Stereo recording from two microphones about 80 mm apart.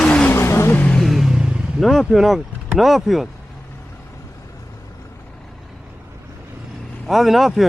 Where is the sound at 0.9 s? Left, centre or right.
Centre.